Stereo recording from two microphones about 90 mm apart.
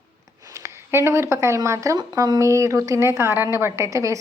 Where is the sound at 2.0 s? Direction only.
45° right (ahead or behind).